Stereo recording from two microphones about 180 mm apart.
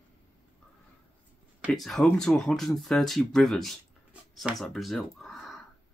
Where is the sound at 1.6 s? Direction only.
Centre (ahead or behind).